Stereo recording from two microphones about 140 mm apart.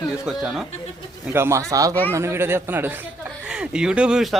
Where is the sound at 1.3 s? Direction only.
20° right (ahead or behind).